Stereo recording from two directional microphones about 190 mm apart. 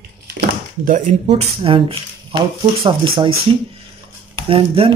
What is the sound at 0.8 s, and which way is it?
Speech, 40° right (ahead or behind).